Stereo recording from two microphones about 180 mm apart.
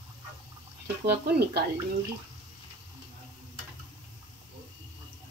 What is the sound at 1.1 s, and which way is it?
Speech, 65° right (ahead or behind).